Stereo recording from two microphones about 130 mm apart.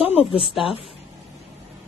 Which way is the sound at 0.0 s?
50° left (ahead or behind).